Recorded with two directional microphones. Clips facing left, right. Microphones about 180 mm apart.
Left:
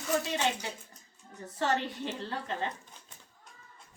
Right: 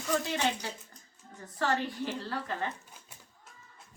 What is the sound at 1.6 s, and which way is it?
Speech, 25° left (ahead or behind).